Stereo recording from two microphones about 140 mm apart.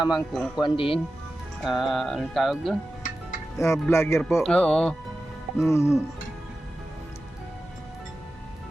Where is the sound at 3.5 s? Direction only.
20° left (ahead or behind).